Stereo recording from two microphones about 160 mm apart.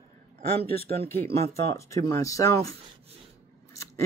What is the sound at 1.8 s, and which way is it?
Speech, 20° left (ahead or behind).